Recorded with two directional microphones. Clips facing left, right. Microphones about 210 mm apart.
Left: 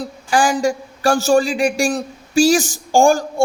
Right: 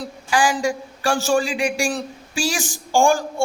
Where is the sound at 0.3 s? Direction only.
45° left (ahead or behind).